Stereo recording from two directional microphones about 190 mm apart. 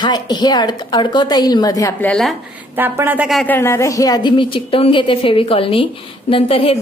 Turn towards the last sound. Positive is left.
turn(degrees=30)  # may be behind; listen again after turning